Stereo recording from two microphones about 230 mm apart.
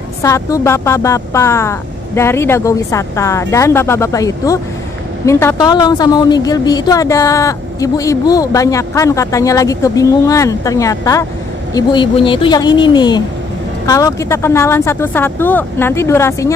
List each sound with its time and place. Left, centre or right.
0.2 s a woman's voice: centre